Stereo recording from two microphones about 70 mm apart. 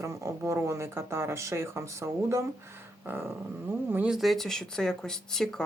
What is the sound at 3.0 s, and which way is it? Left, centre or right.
Speech, right.